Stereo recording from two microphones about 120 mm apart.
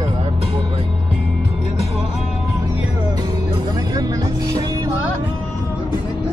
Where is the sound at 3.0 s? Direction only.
35° right (ahead or behind).